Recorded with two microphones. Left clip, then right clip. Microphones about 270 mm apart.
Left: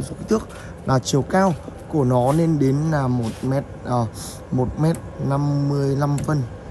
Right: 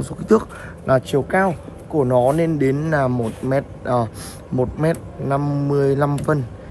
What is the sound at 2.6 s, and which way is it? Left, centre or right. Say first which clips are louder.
Speech: right 3 dB; centre.